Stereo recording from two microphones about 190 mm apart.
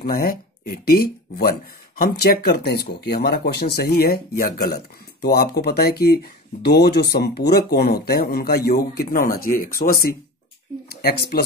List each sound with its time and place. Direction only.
0.0 s speech: 50° left (ahead or behind)